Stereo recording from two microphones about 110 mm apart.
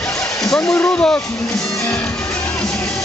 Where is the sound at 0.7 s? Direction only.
15° left (ahead or behind).